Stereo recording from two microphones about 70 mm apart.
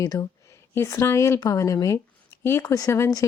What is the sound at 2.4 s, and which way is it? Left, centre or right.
Speech, left.